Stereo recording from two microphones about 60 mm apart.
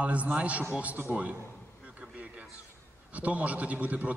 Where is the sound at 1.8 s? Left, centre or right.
Right.